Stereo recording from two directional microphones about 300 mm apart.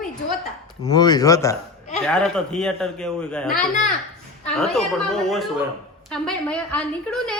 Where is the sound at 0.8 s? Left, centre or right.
Centre.